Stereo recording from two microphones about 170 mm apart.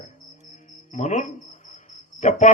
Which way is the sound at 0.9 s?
45° left (ahead or behind).